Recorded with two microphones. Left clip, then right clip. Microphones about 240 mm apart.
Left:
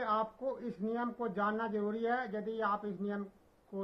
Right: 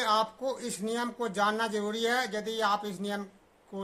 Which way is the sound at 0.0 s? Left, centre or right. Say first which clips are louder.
Right 6 dB; right.